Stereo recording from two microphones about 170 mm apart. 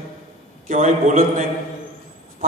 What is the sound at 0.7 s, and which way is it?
Speech, 45° right (ahead or behind).